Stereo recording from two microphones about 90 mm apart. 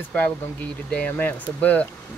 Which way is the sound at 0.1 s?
15° left (ahead or behind).